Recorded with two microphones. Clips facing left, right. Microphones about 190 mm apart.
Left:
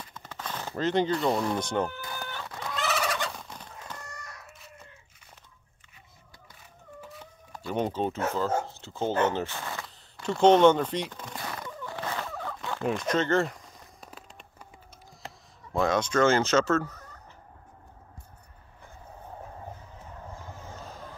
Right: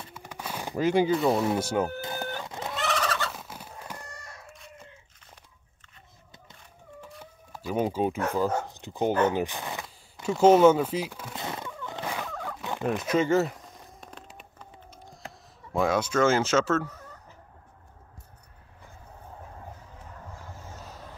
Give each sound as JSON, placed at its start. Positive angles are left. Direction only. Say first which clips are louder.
{"t": 0.1, "sound": "speech", "louder": "right 1 dB", "side_deg": -10}
{"t": 2.0, "sound": "a sound", "louder": "right 5 dB", "side_deg": -25}
{"t": 2.4, "sound": "fowl", "louder": "right 2 dB", "side_deg": -25}
{"t": 2.7, "sound": "fowl", "louder": "even", "side_deg": 0}
{"t": 3.3, "sound": "fowl", "louder": "right 1 dB", "side_deg": -5}
{"t": 4.0, "sound": "chicken", "louder": "even", "side_deg": -30}
{"t": 7.0, "sound": "chicken", "louder": "even", "side_deg": 0}
{"t": 8.6, "sound": "speech", "louder": "right 3 dB", "side_deg": -15}
{"t": 11.3, "sound": "a sound", "louder": "right 2 dB", "side_deg": -25}
{"t": 12.4, "sound": "fowl", "louder": "right 1 dB", "side_deg": -10}
{"t": 12.8, "sound": "a sound", "louder": "right 2 dB", "side_deg": -5}
{"t": 15.7, "sound": "speech", "louder": "even", "side_deg": -5}
{"t": 20.8, "sound": "vehicle", "louder": "left 2 dB", "side_deg": 0}